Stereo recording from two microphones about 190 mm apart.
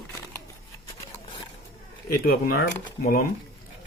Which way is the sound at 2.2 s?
50° left (ahead or behind).